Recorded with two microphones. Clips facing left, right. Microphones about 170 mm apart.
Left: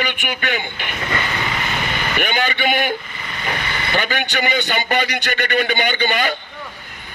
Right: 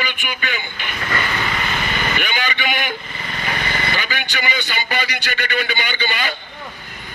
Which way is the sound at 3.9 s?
55° left (ahead or behind).